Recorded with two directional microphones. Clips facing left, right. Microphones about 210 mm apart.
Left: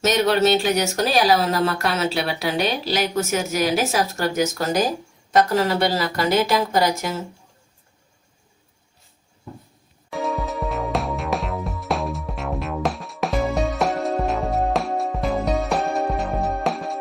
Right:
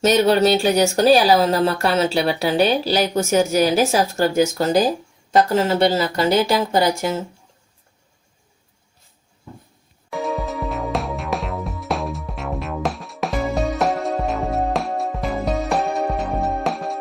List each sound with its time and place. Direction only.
0.3 s speech: 35° right (ahead or behind)
10.1 s music: centre (ahead or behind)